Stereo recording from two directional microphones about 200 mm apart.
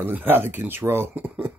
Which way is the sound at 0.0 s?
10° right (ahead or behind).